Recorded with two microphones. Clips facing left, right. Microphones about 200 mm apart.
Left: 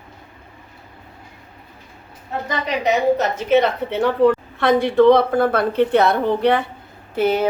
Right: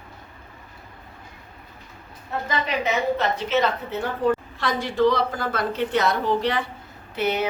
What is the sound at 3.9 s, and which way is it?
A woman's voice, 85° left.